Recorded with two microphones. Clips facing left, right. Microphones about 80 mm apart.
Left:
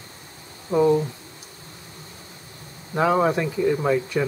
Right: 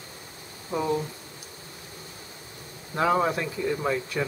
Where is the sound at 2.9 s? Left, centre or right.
Centre.